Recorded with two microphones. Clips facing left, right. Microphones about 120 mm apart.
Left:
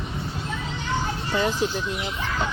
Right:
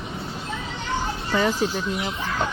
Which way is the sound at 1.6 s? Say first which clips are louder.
Right 1 dB; 40° right (ahead or behind).